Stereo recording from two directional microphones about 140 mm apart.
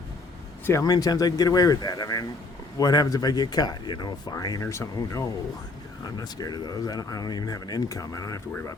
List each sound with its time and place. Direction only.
0.6 s speech: 20° left (ahead or behind)